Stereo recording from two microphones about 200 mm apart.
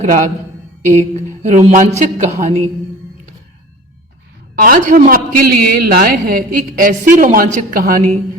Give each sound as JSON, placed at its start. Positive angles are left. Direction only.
{"t": 0.0, "sound": "a woman's voice", "side_deg": -40}
{"t": 4.5, "sound": "a man's voice", "side_deg": -45}